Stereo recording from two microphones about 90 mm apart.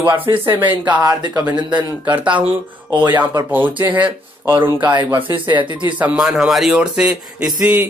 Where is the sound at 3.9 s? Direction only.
20° right (ahead or behind).